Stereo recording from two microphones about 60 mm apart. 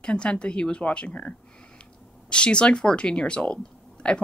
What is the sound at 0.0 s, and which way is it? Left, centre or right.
Speech, centre.